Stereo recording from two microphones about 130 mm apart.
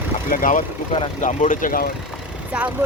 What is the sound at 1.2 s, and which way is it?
Speech, 75° left (ahead or behind).